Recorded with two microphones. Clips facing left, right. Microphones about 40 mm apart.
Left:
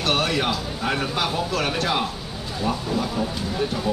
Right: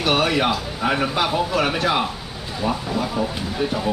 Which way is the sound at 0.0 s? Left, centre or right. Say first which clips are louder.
Right 3 dB; centre.